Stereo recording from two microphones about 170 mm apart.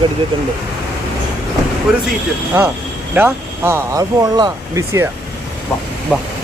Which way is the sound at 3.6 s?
15° right (ahead or behind).